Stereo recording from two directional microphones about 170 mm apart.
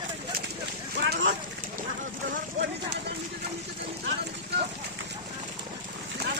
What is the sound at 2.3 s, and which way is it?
Run, 85° right.